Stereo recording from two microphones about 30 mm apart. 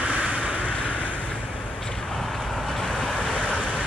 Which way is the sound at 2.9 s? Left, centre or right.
Left.